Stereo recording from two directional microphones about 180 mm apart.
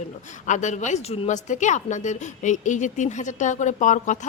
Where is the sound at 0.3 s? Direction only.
40° left (ahead or behind).